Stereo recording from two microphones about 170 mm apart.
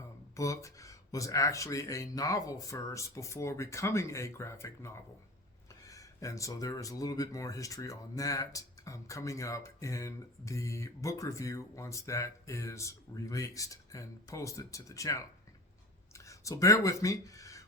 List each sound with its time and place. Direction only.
0.3 s speech: 20° left (ahead or behind)